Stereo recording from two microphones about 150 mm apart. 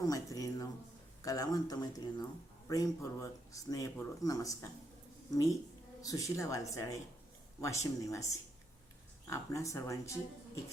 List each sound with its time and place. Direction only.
0.1 s a sound: 25° left (ahead or behind)
1.2 s speech: 25° left (ahead or behind)
6.0 s speech: 20° left (ahead or behind)